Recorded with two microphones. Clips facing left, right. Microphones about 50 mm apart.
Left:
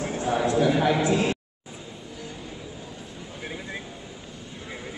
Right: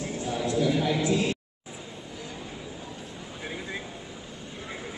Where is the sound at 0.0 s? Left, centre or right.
Left.